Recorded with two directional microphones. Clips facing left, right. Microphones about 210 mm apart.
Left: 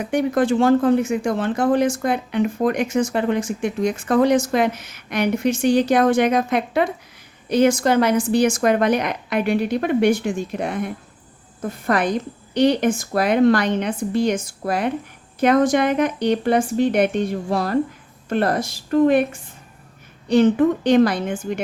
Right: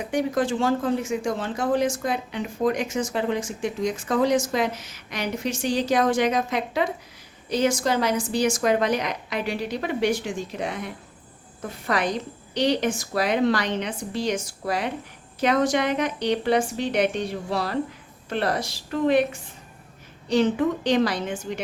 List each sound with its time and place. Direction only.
0.0 s a woman's voice: 60° left (ahead or behind)